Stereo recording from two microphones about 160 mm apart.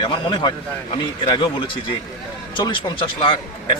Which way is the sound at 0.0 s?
30° left (ahead or behind).